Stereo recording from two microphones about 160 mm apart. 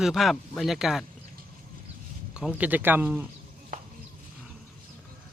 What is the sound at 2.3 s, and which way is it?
Speech, 5° right (ahead or behind).